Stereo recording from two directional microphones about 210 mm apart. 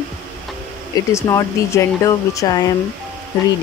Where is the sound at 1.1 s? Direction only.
15° left (ahead or behind).